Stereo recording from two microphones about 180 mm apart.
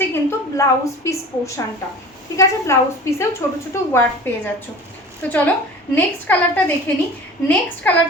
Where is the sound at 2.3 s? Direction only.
15° left (ahead or behind).